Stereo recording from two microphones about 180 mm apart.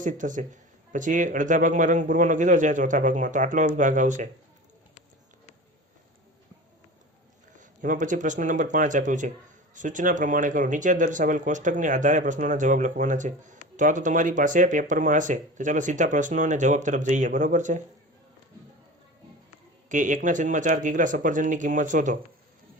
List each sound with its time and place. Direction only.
0.0 s speech: 45° right (ahead or behind)
7.5 s speech: 45° right (ahead or behind)
19.9 s speech: 45° right (ahead or behind)